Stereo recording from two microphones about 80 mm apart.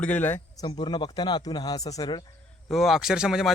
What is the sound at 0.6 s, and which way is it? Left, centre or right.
Speech, left.